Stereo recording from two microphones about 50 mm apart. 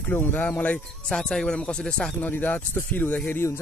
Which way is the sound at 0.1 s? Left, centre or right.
Left.